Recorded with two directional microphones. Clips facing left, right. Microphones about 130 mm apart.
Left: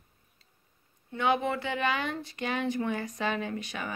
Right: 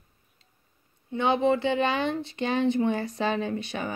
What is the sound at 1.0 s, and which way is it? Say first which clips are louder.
A woman's voice: right 5 dB; 25° right (ahead or behind).